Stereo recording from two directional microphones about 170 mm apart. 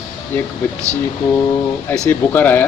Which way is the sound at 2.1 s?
10° left (ahead or behind).